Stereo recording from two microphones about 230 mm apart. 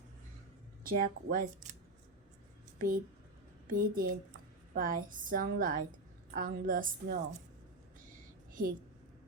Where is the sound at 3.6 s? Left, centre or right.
Right.